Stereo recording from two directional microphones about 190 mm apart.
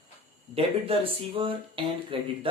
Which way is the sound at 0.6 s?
30° right (ahead or behind).